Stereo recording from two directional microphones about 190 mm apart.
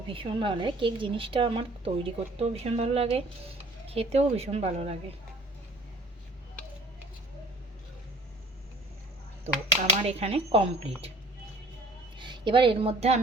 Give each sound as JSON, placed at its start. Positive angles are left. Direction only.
{"t": 0.1, "sound": "a woman's voice", "side_deg": -25}
{"t": 10.0, "sound": "a woman's voice", "side_deg": -30}
{"t": 12.1, "sound": "a woman's voice", "side_deg": -25}